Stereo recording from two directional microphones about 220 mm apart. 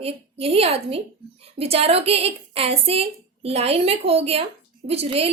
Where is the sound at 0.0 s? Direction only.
25° right (ahead or behind).